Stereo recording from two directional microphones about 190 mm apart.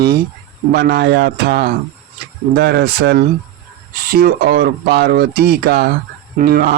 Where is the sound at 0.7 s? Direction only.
55° right (ahead or behind).